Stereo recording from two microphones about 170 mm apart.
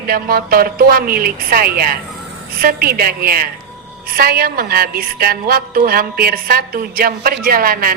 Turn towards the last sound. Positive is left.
turn(degrees=-60)  # may be behind; listen again after turning